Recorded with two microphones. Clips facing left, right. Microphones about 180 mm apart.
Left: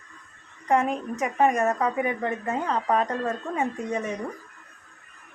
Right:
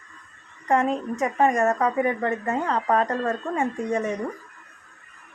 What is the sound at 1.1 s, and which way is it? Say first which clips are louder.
Speech: even; centre (ahead or behind).